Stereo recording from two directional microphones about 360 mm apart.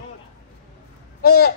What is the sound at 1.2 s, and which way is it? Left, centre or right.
Speech, left.